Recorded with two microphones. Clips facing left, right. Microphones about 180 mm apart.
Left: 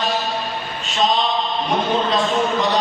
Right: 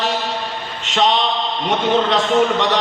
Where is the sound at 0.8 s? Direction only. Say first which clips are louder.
Right 3 dB; 70° right (ahead or behind).